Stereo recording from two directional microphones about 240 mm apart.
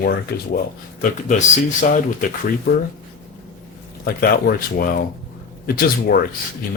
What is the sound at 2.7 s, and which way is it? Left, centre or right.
Speech, left.